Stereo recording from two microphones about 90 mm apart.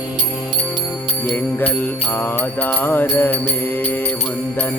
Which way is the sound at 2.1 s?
20° left (ahead or behind).